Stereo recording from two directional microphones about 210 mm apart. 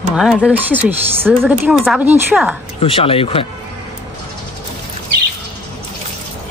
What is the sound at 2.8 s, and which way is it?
Speech, 25° left (ahead or behind).